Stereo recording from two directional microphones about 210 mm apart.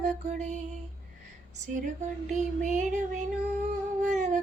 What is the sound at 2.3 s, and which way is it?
Child singing, 35° right (ahead or behind).